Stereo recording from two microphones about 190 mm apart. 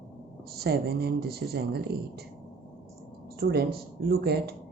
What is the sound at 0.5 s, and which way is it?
Speech, 55° right (ahead or behind).